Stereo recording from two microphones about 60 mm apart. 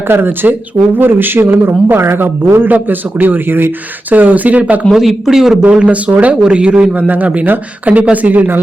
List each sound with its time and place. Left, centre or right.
0.1 s a man's voice: right
4.9 s speech: centre
5.8 s a man's voice: right
6.9 s speech: right